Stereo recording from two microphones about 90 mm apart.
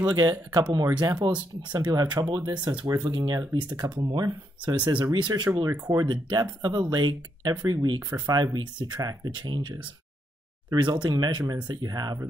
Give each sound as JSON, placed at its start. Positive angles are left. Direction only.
{"t": 0.0, "sound": "speech", "side_deg": -50}
{"t": 1.2, "sound": "speech", "side_deg": -75}
{"t": 1.7, "sound": "speech", "side_deg": -50}
{"t": 5.7, "sound": "speech", "side_deg": -30}
{"t": 6.0, "sound": "speech", "side_deg": -50}